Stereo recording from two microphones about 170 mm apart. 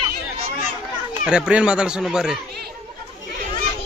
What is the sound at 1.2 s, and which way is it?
Speech, 5° right (ahead or behind).